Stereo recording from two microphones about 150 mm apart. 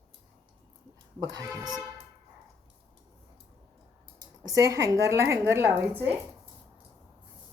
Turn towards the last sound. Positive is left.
turn(degrees=-15)  # may be behind; listen again after turning